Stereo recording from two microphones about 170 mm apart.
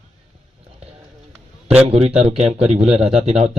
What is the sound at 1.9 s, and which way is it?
Speech, 35° right (ahead or behind).